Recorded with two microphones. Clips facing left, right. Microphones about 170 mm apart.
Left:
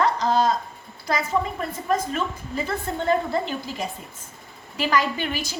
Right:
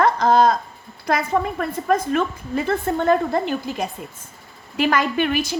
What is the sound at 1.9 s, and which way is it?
A woman's voice, 55° right (ahead or behind).